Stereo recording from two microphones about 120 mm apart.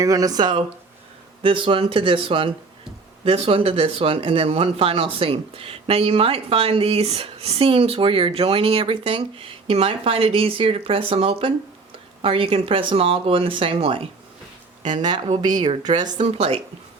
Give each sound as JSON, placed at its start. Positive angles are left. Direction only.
{"t": 0.0, "sound": "speech", "side_deg": -30}
{"t": 1.4, "sound": "speech", "side_deg": -50}
{"t": 14.9, "sound": "speech", "side_deg": -35}
{"t": 16.0, "sound": "speech", "side_deg": -75}